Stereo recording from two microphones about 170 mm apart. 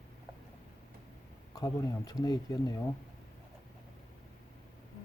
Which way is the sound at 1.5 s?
20° left (ahead or behind).